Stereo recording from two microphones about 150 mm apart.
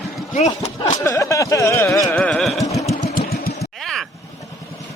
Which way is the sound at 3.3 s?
85° left.